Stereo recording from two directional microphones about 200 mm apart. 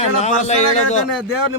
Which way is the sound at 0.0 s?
35° left (ahead or behind).